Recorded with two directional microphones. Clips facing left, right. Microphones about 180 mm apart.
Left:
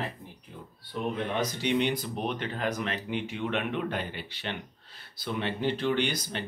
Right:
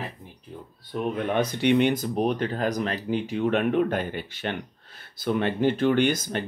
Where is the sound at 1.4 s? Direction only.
60° right (ahead or behind).